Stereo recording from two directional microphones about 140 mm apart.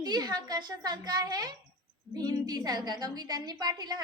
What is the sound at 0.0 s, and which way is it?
A woman's voice, 30° right (ahead or behind).